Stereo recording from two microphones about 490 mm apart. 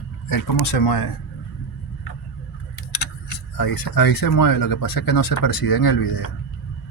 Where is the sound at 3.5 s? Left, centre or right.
Left.